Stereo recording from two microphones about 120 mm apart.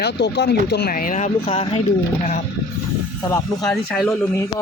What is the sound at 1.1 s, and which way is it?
Speech, 80° left.